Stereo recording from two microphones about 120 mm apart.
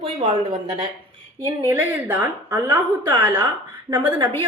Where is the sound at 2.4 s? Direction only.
35° right (ahead or behind).